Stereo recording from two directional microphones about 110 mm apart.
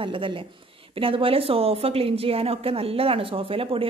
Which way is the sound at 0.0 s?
50° right (ahead or behind).